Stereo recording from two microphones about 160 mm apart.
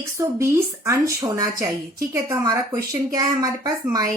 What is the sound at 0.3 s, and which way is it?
A woman's voice, 20° right (ahead or behind).